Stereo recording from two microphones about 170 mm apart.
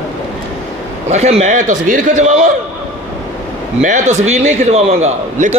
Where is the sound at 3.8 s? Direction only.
45° right (ahead or behind).